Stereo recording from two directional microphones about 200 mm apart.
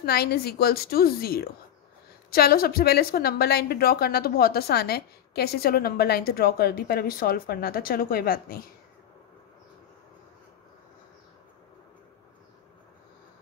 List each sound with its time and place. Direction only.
0.0 s a woman's voice: 50° left (ahead or behind)